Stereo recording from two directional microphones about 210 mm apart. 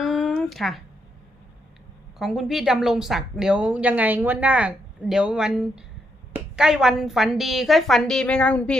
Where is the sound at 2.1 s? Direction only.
Centre (ahead or behind).